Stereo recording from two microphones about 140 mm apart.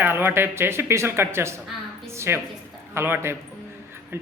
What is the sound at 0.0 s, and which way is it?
A woman's voice, 15° right (ahead or behind).